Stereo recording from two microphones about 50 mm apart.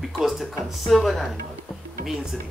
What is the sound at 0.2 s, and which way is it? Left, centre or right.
A man's voice, centre.